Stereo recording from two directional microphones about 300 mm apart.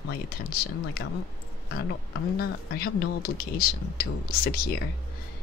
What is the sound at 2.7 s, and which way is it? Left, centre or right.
A woman's voice, left.